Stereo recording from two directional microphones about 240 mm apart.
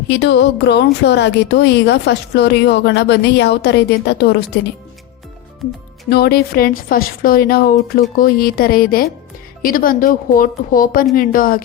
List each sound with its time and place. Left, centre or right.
0.1 s a woman's voice: left
6.1 s a woman's voice: left